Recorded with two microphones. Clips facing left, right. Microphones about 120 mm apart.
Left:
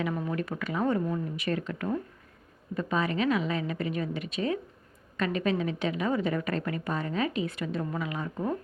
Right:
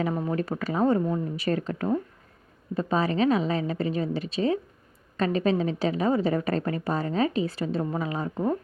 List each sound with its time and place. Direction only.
0.0 s a woman's voice: 30° right (ahead or behind)